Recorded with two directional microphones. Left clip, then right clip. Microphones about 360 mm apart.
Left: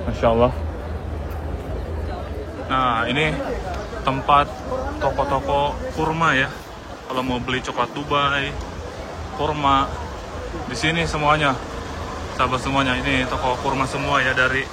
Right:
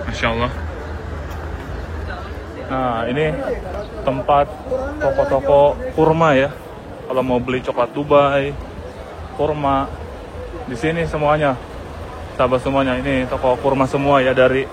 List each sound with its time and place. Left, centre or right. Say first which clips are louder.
0.2 s speech: left 3 dB; centre
2.7 s speech: even; centre